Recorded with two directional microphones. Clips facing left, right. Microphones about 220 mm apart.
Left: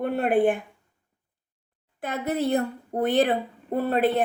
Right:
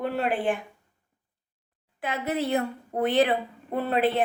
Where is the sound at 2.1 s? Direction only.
50° left (ahead or behind).